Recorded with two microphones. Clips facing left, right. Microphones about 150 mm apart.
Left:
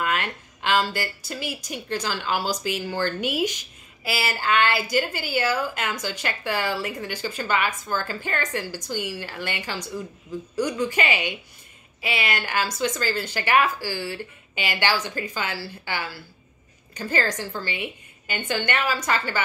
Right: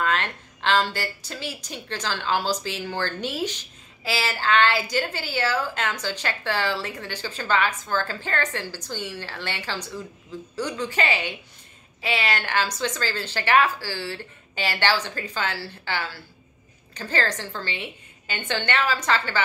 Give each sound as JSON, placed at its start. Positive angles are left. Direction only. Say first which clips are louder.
{"t": 0.0, "sound": "a woman's voice", "louder": "right 1 dB", "side_deg": 10}